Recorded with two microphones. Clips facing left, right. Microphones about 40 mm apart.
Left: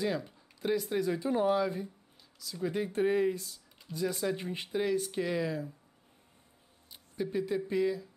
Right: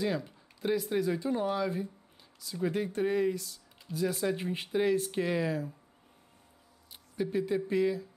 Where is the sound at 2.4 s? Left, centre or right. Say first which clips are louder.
Right 2 dB; centre.